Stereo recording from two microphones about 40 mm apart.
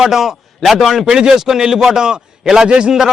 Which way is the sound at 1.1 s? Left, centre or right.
Centre.